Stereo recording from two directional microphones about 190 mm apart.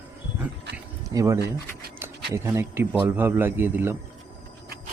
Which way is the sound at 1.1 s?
15° right (ahead or behind).